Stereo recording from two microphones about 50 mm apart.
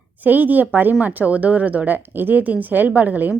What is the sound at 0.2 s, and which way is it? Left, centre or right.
A woman's voice, right.